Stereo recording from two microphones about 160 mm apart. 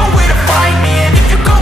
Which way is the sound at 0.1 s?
Centre (ahead or behind).